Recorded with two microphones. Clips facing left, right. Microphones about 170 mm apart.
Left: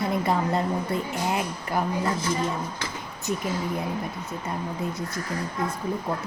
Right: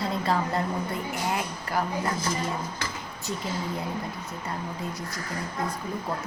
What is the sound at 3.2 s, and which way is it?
Speech, 20° left (ahead or behind).